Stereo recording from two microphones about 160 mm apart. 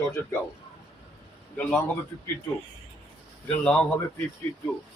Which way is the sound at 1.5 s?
5° left (ahead or behind).